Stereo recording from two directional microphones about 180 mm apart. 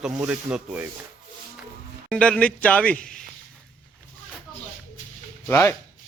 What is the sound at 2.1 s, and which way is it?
A man's voice, 5° left (ahead or behind).